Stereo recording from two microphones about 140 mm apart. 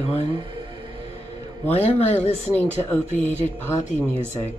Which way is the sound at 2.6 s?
15° left (ahead or behind).